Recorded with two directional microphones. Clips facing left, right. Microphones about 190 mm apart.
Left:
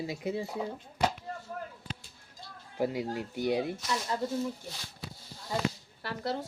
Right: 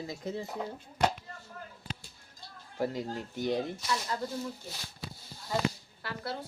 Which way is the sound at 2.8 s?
15° left (ahead or behind).